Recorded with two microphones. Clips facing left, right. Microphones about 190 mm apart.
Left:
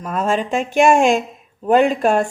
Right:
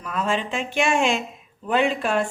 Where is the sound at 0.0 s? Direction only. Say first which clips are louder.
Left 5 dB; 45° left (ahead or behind).